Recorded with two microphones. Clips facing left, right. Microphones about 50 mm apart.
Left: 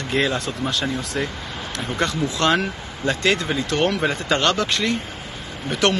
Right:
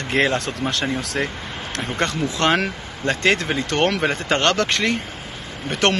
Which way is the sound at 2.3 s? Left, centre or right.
Right.